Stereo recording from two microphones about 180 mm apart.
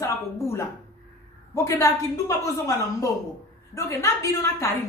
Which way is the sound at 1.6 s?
20° left (ahead or behind).